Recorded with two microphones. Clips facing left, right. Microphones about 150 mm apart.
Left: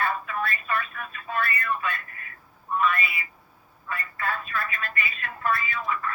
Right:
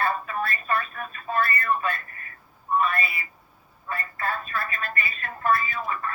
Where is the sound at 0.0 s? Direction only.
35° right (ahead or behind).